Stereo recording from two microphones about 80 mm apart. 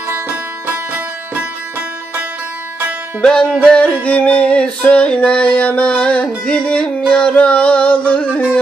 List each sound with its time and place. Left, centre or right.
0.7 s music: centre
3.2 s music: centre